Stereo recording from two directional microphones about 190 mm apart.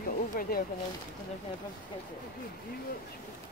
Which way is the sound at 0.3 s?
50° left (ahead or behind).